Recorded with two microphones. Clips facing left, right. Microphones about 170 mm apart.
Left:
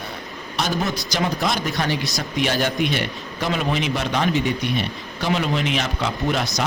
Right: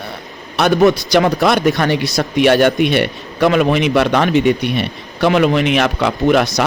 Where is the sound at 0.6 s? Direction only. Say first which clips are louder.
Right 12 dB; 65° right (ahead or behind).